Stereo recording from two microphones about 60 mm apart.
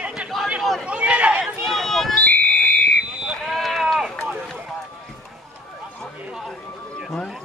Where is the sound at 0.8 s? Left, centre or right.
Centre.